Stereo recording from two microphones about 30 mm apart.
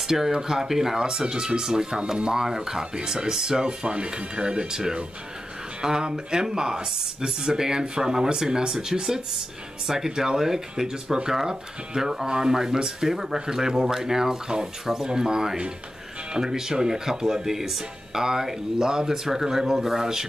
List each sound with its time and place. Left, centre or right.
0.0 s speech: centre
0.9 s speech: right
2.4 s speech: centre
3.8 s speech: right; by 20.2 s centre